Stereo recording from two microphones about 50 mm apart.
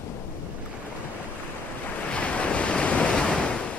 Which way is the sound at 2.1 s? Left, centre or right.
Left.